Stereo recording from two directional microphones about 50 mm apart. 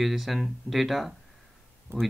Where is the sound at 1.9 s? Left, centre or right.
Right.